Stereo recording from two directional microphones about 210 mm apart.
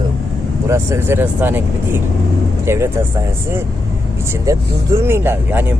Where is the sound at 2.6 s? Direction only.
10° right (ahead or behind).